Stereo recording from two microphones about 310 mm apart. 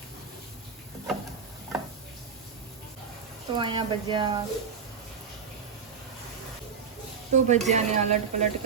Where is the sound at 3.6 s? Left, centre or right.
Centre.